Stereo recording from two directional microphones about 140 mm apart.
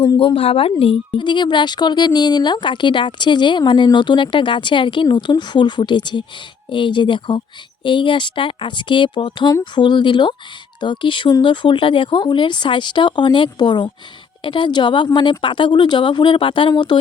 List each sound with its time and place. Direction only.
0.0 s speech: 35° left (ahead or behind)